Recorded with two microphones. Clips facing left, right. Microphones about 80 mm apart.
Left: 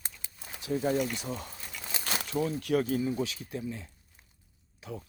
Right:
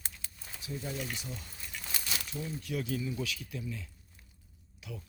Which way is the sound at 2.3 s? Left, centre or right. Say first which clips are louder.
Left 12 dB; left.